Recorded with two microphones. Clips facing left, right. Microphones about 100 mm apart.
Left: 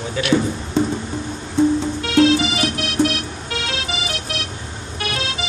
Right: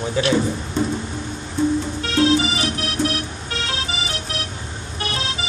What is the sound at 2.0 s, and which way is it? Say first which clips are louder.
Music: left 3 dB; 30° right (ahead or behind).